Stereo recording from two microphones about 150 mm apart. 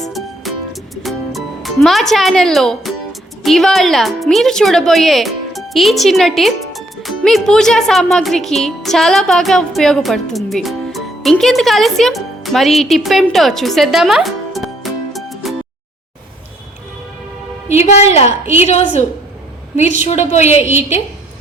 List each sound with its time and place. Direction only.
0.0 s music: centre (ahead or behind)
1.0 s speech: centre (ahead or behind)
17.7 s a woman's voice: 45° left (ahead or behind)
20.1 s a woman's voice: 50° left (ahead or behind)